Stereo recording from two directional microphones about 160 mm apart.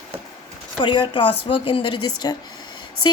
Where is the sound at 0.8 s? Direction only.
30° left (ahead or behind).